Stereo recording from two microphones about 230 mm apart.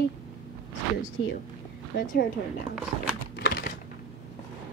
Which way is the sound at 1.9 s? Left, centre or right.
Left.